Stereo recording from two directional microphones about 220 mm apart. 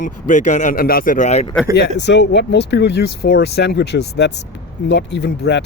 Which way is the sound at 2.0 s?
50° left (ahead or behind).